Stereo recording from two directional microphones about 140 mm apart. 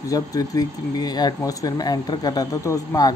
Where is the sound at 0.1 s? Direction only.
25° left (ahead or behind).